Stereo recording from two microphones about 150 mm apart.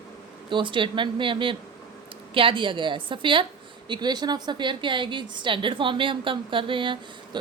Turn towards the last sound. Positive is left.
turn(degrees=-35)  # may be behind; listen again after turning